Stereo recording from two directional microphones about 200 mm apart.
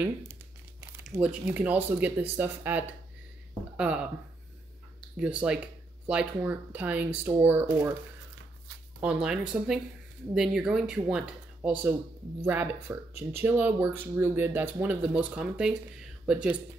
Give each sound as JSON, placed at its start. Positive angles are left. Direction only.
{"t": 0.0, "sound": "crumpling", "side_deg": -10}
{"t": 1.2, "sound": "speech", "side_deg": -5}
{"t": 5.1, "sound": "speech", "side_deg": -5}
{"t": 9.0, "sound": "speech", "side_deg": -5}